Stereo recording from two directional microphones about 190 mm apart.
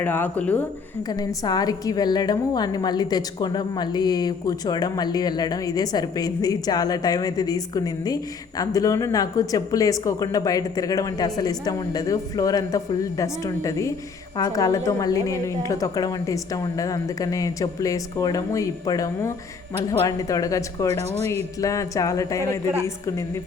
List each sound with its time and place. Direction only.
0.0 s a woman's voice: 10° left (ahead or behind)
1.0 s a woman's voice: 20° left (ahead or behind)